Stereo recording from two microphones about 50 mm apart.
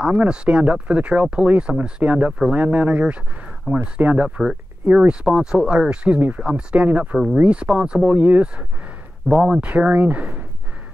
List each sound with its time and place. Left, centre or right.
0.0 s speech: right
6.1 s speech: right
9.4 s speech: centre
9.7 s speech: right